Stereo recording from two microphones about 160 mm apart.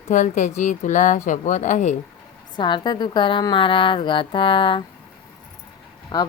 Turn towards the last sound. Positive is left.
turn(degrees=25)  # may be behind; listen again after turning